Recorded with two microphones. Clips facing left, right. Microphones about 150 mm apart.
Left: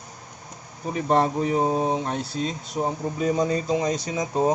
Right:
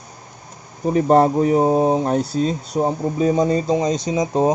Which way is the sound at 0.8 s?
40° right (ahead or behind).